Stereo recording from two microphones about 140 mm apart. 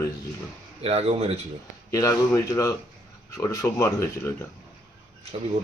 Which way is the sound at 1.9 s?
20° left (ahead or behind).